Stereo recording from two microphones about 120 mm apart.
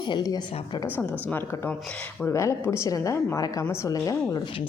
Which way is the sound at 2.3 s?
25° left (ahead or behind).